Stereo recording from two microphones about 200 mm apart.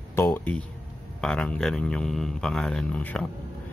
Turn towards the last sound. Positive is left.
turn(degrees=5)  # may be behind; listen again after turning